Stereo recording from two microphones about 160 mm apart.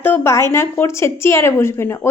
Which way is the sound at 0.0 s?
15° left (ahead or behind).